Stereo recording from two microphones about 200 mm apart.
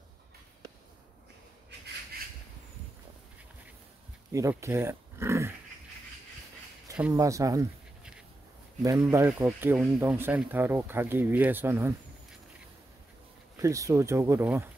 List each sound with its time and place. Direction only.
4.3 s speech: 15° right (ahead or behind)
7.0 s speech: 15° right (ahead or behind)
8.8 s speech: 15° right (ahead or behind)
13.6 s speech: 15° right (ahead or behind)